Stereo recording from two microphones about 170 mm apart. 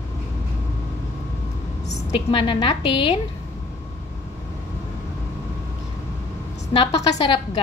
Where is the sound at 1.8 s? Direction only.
30° left (ahead or behind).